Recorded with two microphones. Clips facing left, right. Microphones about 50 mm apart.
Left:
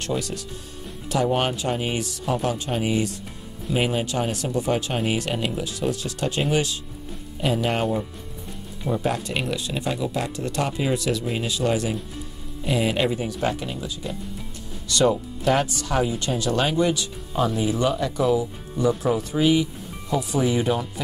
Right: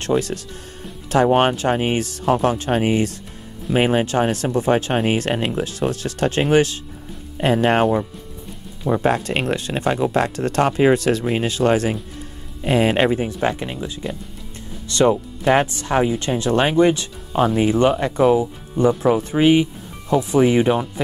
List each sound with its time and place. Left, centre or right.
0.0 s speech: right